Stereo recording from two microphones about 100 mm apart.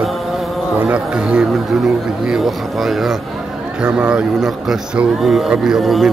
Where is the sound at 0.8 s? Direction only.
10° right (ahead or behind).